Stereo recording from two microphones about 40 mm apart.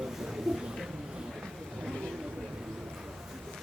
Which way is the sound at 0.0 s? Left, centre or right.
Centre.